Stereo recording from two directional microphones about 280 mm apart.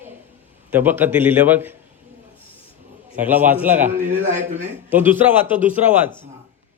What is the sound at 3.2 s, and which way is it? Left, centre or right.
Speech, centre.